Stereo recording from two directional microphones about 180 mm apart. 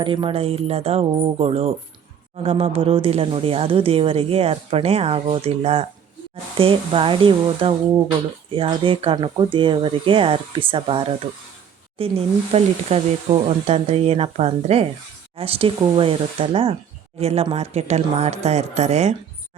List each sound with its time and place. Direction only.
0.0 s speech: 30° right (ahead or behind)